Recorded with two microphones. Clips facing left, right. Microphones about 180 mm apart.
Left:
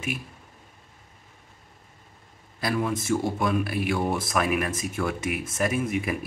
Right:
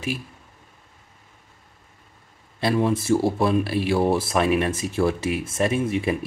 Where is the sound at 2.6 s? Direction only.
30° right (ahead or behind).